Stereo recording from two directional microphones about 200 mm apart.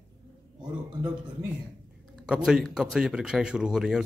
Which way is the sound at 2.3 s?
5° right (ahead or behind).